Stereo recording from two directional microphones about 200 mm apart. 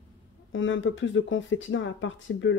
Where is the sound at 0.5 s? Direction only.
70° left (ahead or behind).